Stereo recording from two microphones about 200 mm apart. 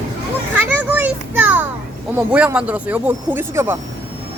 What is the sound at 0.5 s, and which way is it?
Speech, 10° right (ahead or behind).